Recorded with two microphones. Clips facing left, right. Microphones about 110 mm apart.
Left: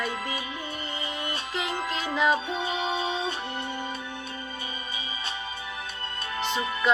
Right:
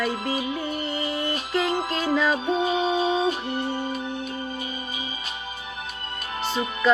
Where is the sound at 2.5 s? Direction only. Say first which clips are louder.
Right 6 dB; 25° right (ahead or behind).